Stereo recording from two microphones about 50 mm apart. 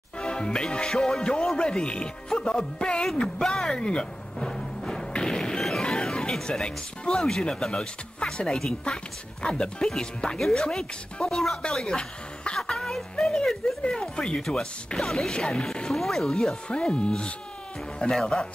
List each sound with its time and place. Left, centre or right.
0.2 s speech: centre
4.4 s music: centre
6.6 s a woman's voice: centre
14.1 s speech: centre
15.0 s speech: centre
16.6 s speech: left